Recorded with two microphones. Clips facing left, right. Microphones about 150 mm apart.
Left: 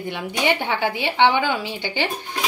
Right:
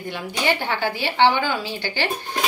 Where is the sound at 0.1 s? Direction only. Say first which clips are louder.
Left 1 dB; 20° left (ahead or behind).